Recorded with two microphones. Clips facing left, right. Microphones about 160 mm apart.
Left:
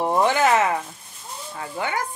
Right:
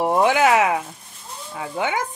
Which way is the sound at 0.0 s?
10° right (ahead or behind).